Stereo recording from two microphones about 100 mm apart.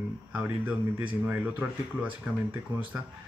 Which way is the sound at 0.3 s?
15° right (ahead or behind).